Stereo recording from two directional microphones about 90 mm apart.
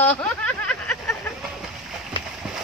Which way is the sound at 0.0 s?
10° left (ahead or behind).